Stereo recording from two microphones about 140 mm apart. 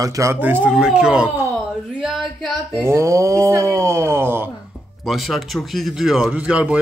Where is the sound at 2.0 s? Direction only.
Centre (ahead or behind).